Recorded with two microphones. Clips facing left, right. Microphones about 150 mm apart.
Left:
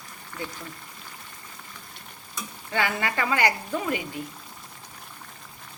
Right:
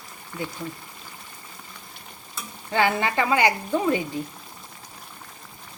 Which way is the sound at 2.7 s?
30° right (ahead or behind).